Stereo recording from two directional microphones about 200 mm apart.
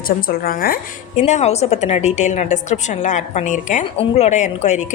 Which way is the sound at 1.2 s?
35° left (ahead or behind).